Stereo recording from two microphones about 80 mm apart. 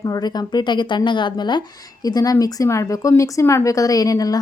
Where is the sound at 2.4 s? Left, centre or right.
Left.